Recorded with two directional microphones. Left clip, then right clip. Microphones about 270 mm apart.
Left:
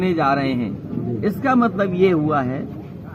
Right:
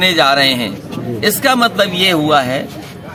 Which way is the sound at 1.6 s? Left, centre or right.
Right.